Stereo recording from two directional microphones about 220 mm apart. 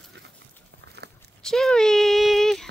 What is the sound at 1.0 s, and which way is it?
Walk, 50° right (ahead or behind).